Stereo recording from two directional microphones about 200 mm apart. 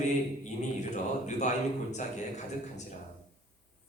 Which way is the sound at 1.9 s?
35° left (ahead or behind).